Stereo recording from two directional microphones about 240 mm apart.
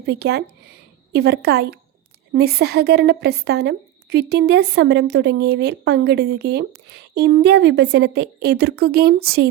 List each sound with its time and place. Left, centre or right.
0.0 s a woman's voice: right